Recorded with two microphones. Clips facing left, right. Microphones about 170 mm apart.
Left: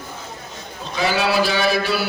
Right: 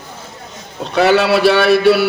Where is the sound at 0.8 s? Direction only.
65° right (ahead or behind).